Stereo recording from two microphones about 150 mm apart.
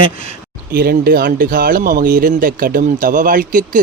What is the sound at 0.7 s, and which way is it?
Speech, 85° right.